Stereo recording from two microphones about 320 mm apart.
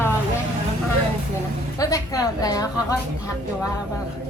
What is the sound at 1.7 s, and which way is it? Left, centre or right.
Speech, centre.